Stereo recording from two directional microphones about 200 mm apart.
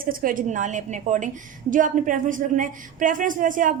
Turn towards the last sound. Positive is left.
turn(degrees=-40)  # may be behind; listen again after turning